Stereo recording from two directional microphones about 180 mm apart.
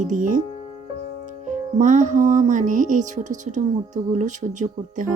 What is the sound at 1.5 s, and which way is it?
Music, 45° right (ahead or behind).